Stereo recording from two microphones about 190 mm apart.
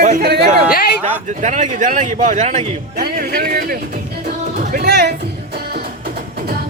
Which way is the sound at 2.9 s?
55° right (ahead or behind).